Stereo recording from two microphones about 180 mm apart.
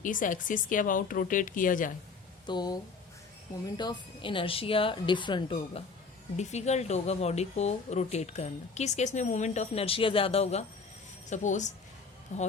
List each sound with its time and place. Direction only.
0.0 s speech: 45° left (ahead or behind)
2.5 s a woman's voice: 20° left (ahead or behind)
6.3 s speech: 40° left (ahead or behind)